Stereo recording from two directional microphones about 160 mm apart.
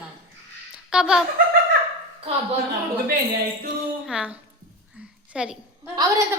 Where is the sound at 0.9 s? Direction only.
5° right (ahead or behind).